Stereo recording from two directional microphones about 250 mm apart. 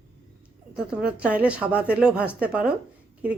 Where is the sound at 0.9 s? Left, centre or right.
Centre.